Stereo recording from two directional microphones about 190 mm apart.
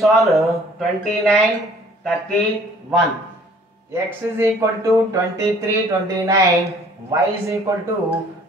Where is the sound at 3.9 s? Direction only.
15° right (ahead or behind).